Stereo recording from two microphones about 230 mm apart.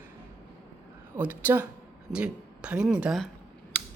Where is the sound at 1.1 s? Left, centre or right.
Centre.